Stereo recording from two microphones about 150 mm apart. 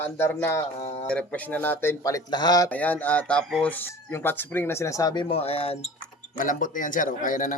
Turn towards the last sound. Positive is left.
turn(degrees=60)  # may be behind; listen again after turning